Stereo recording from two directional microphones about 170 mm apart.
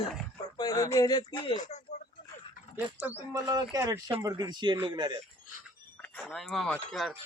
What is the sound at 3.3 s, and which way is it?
Speech, 20° right (ahead or behind).